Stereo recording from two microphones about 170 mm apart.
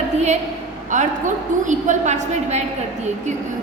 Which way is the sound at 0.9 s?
45° right (ahead or behind).